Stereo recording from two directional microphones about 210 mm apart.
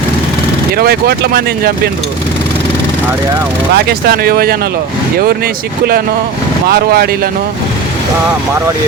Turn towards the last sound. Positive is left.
turn(degrees=-45)  # may be behind; listen again after turning